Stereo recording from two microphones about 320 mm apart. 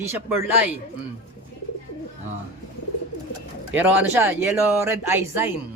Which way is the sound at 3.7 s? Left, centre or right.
Centre.